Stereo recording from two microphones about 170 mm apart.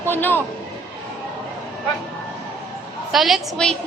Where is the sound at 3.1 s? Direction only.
Centre (ahead or behind).